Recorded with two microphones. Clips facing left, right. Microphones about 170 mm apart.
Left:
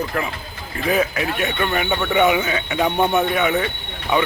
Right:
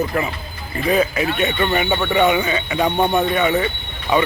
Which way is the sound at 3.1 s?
Centre (ahead or behind).